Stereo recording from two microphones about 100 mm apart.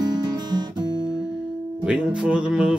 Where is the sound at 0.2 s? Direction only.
45° right (ahead or behind).